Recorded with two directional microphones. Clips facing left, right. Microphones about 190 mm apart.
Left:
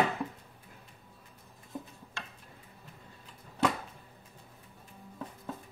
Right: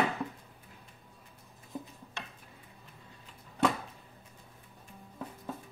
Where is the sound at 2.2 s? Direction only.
20° right (ahead or behind).